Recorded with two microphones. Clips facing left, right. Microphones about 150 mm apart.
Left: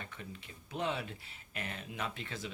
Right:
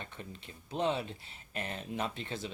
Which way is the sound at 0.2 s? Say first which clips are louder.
Right 1 dB; 35° right (ahead or behind).